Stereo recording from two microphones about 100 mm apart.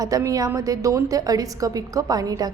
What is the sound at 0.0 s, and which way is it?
A woman's voice, 35° right (ahead or behind).